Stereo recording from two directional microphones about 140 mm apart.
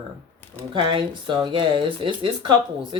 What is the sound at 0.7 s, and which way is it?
Speech, 35° right (ahead or behind).